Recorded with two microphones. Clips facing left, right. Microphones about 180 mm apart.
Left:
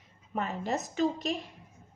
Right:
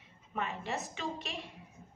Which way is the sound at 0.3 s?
40° left (ahead or behind).